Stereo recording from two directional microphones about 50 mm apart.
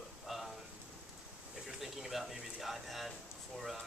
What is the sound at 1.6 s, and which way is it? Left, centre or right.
Speech, centre.